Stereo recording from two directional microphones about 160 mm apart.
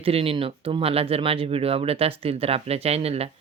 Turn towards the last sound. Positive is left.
turn(degrees=-40)  # may be behind; listen again after turning